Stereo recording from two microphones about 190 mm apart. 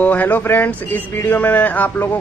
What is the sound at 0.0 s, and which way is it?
Speech, 10° left (ahead or behind).